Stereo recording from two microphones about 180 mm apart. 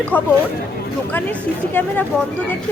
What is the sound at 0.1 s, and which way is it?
Speech, 10° left (ahead or behind).